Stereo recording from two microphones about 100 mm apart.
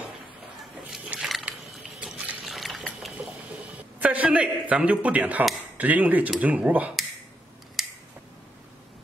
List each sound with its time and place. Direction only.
0.8 s a sound: 10° right (ahead or behind)
2.5 s liquid: centre (ahead or behind)
3.7 s a man's voice: 15° right (ahead or behind)
7.8 s scissors: centre (ahead or behind)